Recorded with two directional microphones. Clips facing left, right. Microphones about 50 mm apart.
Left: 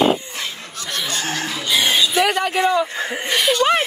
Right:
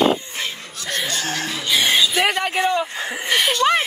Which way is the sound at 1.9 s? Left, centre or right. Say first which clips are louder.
Left 2 dB; right.